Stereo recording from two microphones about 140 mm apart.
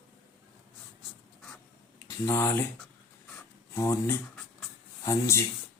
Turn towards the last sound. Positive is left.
turn(degrees=20)  # may be behind; listen again after turning